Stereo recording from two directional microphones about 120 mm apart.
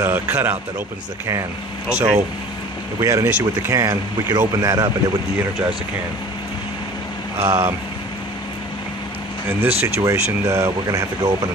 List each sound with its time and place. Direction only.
0.0 s speech: 20° right (ahead or behind)
1.9 s speech: 65° right (ahead or behind)
3.0 s speech: 25° right (ahead or behind)
3.3 s speech: 15° right (ahead or behind)
7.3 s speech: 20° right (ahead or behind)
9.8 s speech: 20° right (ahead or behind)